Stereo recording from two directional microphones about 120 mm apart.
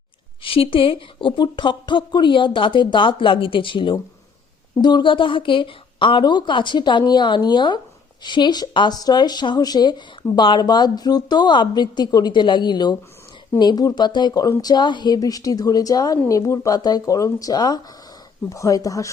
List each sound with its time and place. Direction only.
0.4 s a woman's voice: 50° left (ahead or behind); by 19.1 s 25° left (ahead or behind)